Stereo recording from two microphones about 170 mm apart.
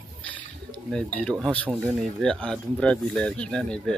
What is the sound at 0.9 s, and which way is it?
Speech, 5° left (ahead or behind).